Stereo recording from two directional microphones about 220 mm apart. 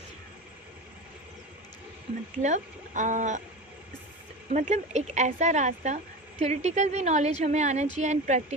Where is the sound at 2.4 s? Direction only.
35° right (ahead or behind).